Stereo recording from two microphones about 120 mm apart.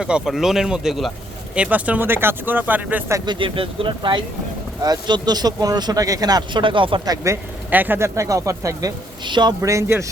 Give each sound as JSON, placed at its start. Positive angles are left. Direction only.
{"t": 0.0, "sound": "speech", "side_deg": -5}
{"t": 3.2, "sound": "speech", "side_deg": -45}
{"t": 7.7, "sound": "speech", "side_deg": -15}
{"t": 9.2, "sound": "speech", "side_deg": -40}
{"t": 9.6, "sound": "speech", "side_deg": -25}